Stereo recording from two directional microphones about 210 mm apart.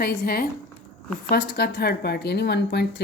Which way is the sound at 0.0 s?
45° left (ahead or behind).